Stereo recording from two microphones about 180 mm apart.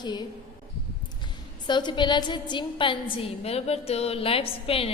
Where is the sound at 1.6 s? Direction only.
25° left (ahead or behind).